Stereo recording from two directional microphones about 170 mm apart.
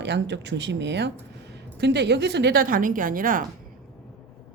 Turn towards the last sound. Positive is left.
turn(degrees=-55)  # may be behind; listen again after turning